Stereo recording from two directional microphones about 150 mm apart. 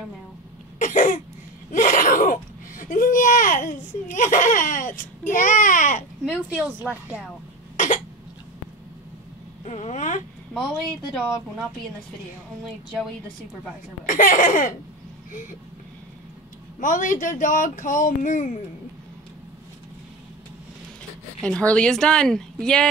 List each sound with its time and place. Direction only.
0.7 s cough: 60° left (ahead or behind)
1.7 s a sound: 65° left (ahead or behind)
5.3 s speech: 60° left (ahead or behind)
6.5 s speech: 10° right (ahead or behind)
7.7 s cough: 55° left (ahead or behind)
9.7 s speech: 50° left (ahead or behind)
10.5 s speech: centre (ahead or behind)
12.6 s speech: centre (ahead or behind)
14.0 s speech: 65° left (ahead or behind)
16.8 s speech: 60° left (ahead or behind)
21.4 s speech: 5° left (ahead or behind)